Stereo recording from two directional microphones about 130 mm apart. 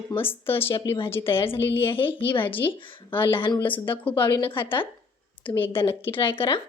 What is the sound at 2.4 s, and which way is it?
Speech, 15° left (ahead or behind).